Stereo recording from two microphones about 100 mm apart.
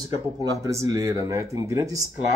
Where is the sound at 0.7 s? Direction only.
35° right (ahead or behind).